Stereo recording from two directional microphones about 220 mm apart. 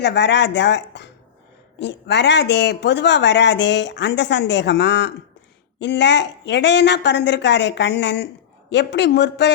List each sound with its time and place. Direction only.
0.0 s speech: 50° left (ahead or behind)